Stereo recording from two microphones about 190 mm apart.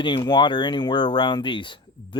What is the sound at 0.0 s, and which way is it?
Speech, 25° left (ahead or behind).